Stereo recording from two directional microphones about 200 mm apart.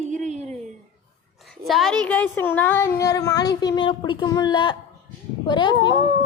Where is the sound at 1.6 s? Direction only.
Centre (ahead or behind).